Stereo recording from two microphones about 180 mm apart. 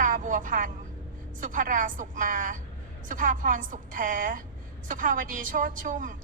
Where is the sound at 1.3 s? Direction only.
50° right (ahead or behind).